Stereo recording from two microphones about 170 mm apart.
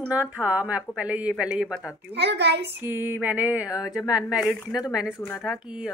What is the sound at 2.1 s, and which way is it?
Speech, 80° right.